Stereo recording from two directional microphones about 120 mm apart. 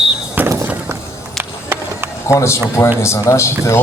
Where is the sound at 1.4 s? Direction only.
20° right (ahead or behind).